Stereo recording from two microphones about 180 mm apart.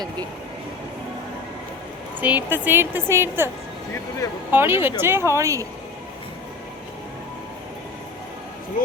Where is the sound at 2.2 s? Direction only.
10° right (ahead or behind).